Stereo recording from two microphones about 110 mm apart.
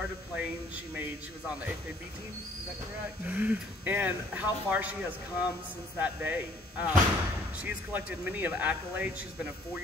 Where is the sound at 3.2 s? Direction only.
15° right (ahead or behind).